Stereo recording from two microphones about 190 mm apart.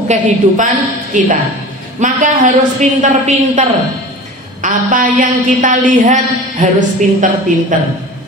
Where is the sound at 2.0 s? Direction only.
40° right (ahead or behind).